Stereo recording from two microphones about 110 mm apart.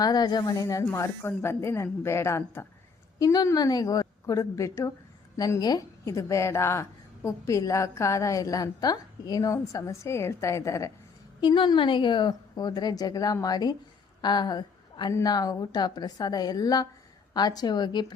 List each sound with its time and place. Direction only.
0.0 s a woman's voice: 35° left (ahead or behind)
11.3 s a woman's voice: 45° left (ahead or behind)
14.2 s a sound: 40° left (ahead or behind)
15.2 s a woman's voice: 35° left (ahead or behind)